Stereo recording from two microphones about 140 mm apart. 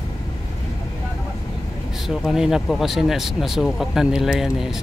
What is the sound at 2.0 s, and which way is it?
Speech, centre (ahead or behind).